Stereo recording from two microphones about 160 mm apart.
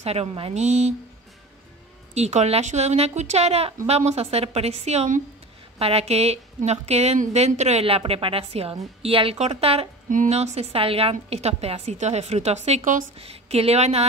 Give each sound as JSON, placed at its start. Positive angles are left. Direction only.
{"t": 0.0, "sound": "a woman's voice", "side_deg": -40}
{"t": 2.1, "sound": "a woman's voice", "side_deg": -45}
{"t": 10.0, "sound": "a woman's voice", "side_deg": -50}